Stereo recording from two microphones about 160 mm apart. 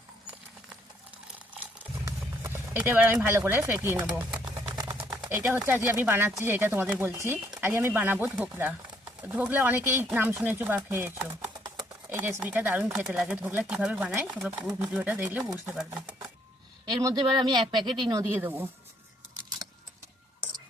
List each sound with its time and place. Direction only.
2.0 s speech: 15° right (ahead or behind)
4.4 s a sound: 25° right (ahead or behind)
5.3 s speech: 10° right (ahead or behind)
16.8 s speech: 25° right (ahead or behind)